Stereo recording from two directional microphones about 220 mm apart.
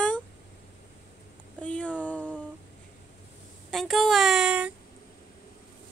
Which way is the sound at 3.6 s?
Centre (ahead or behind).